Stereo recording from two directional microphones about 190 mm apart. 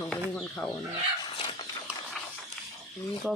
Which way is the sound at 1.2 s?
25° left (ahead or behind).